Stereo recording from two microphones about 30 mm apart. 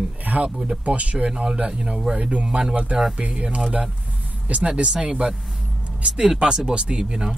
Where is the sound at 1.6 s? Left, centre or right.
Right.